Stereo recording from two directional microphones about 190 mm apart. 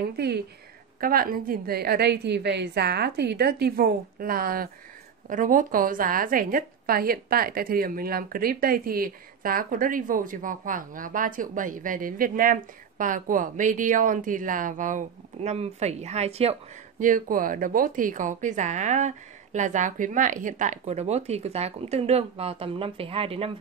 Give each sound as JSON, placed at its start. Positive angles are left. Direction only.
{"t": 1.0, "sound": "a woman's voice", "side_deg": -50}
{"t": 17.0, "sound": "a woman's voice", "side_deg": -45}